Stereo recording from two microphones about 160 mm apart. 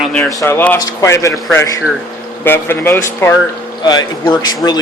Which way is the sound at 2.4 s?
15° left (ahead or behind).